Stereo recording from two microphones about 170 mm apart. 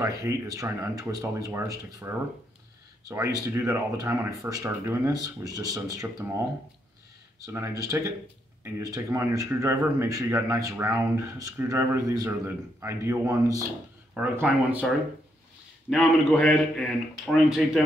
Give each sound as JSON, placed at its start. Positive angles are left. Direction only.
{"t": 0.0, "sound": "speech", "side_deg": -20}
{"t": 15.9, "sound": "a man's voice", "side_deg": 0}